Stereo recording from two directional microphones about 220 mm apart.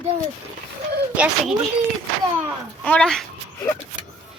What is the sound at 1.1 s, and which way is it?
Speech, 5° right (ahead or behind).